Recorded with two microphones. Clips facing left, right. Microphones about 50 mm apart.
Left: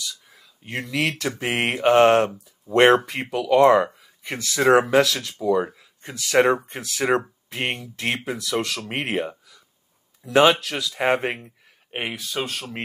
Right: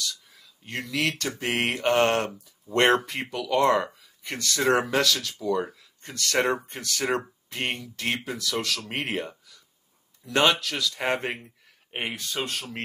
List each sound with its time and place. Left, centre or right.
0.0 s a sound: centre
1.4 s speech: centre
7.8 s speech: centre